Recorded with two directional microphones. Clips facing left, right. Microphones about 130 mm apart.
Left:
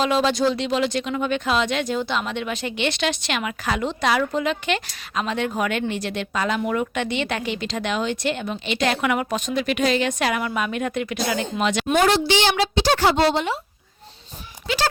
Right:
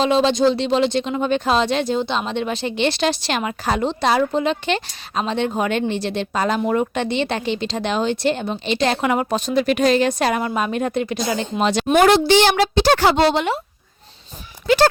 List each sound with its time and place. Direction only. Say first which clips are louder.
0.0 s speech: right 4 dB; 25° right (ahead or behind)
11.9 s a woman's voice: right 6 dB; 55° right (ahead or behind); by 13.6 s 75° right (ahead or behind)